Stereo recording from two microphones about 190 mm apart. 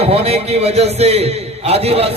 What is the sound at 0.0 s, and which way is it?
A man's voice, 30° right (ahead or behind).